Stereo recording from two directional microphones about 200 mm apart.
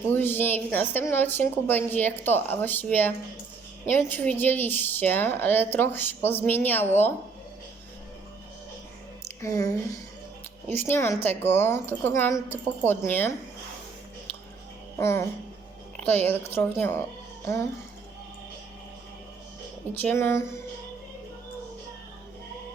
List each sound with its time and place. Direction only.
0.1 s a woman's voice: 10° left (ahead or behind)
9.2 s a woman's voice: 15° left (ahead or behind)
14.9 s a woman's voice: 15° left (ahead or behind)
19.9 s a woman's voice: 10° left (ahead or behind)